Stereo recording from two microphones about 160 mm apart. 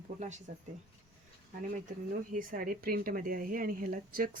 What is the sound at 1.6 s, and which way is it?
Speech, 55° right (ahead or behind).